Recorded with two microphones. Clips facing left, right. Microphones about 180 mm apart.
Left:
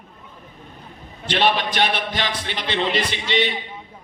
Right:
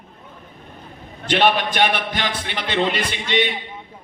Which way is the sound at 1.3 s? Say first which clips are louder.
Right 2 dB; 50° right (ahead or behind).